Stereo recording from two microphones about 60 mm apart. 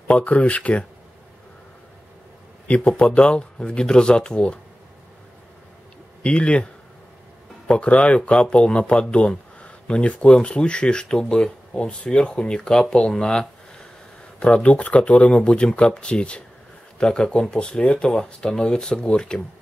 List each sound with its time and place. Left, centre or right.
0.1 s speech: left
2.7 s speech: centre
6.2 s speech: centre
7.7 s speech: centre